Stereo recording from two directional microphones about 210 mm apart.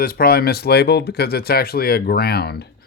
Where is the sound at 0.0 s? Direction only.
45° left (ahead or behind).